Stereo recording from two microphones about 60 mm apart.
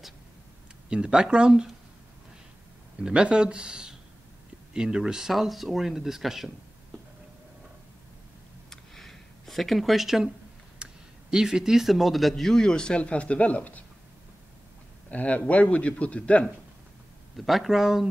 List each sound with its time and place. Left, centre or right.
0.8 s speech: centre
3.0 s speech: centre
8.6 s a sound: centre
10.8 s speech: centre; by 13.8 s left
15.0 s a man's voice: left
17.4 s speech: centre